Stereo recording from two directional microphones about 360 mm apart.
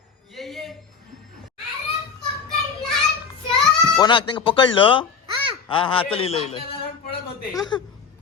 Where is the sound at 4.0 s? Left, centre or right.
Centre.